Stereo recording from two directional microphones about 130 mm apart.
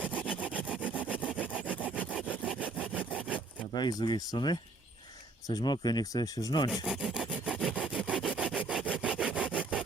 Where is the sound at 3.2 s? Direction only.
10° right (ahead or behind).